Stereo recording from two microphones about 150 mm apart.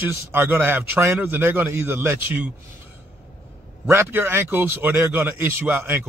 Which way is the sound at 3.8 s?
15° right (ahead or behind).